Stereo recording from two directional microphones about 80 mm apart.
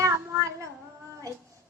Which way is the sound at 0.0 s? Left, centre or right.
Right.